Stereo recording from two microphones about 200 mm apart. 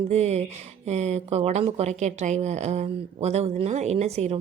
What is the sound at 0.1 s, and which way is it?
Speech, 35° right (ahead or behind).